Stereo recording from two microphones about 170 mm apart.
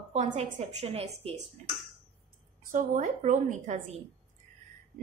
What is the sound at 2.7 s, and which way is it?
A woman's voice, 45° right (ahead or behind).